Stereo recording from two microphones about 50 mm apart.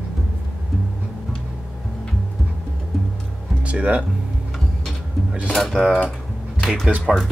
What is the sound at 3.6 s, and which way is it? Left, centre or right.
Speech, right.